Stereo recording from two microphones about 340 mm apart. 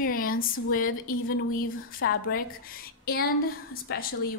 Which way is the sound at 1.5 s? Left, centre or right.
Left.